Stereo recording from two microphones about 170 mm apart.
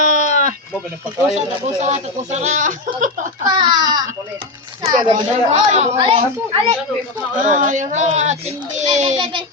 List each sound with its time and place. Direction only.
0.0 s sheep: 50° right (ahead or behind)
1.4 s speech: 40° right (ahead or behind)
3.4 s a woman's voice: 25° right (ahead or behind)
7.4 s speech: 45° right (ahead or behind)